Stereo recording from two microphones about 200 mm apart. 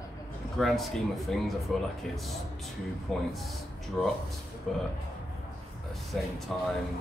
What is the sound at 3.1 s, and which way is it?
Speech, centre (ahead or behind).